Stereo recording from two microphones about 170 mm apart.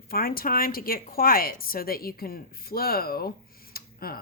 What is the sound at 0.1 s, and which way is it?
Speech, 60° left (ahead or behind).